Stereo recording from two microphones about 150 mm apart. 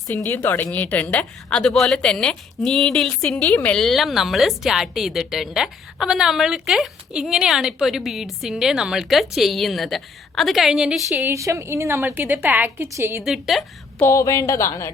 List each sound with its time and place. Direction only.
0.1 s a woman's voice: 15° left (ahead or behind); by 11.0 s 5° right (ahead or behind)
11.1 s a woman's voice: 20° right (ahead or behind)
13.2 s a woman's voice: centre (ahead or behind)
14.0 s a woman's voice: 20° left (ahead or behind)